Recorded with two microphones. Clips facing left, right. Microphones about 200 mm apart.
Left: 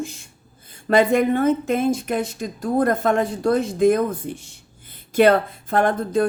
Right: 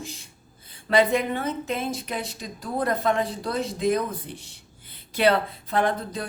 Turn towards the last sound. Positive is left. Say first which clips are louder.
# left 5 dB
turn(degrees=50)  # may be behind; listen again after turning